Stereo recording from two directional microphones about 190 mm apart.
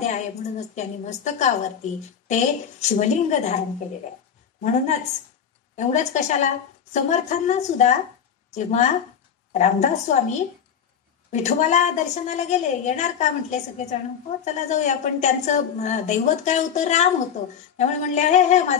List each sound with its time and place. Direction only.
0.0 s a woman's voice: 40° left (ahead or behind)
5.8 s a woman's voice: 40° left (ahead or behind)